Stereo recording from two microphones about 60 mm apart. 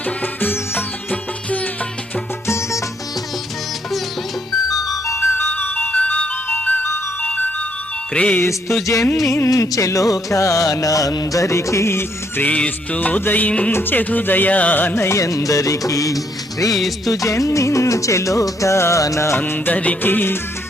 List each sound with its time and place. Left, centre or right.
0.0 s music: left
2.5 s music: left
5.0 s music: left; by 8.4 s centre
9.2 s music: left
9.5 s music: left
12.4 s music: left
13.7 s music: left
14.9 s music: left
15.2 s music: left
19.4 s music: left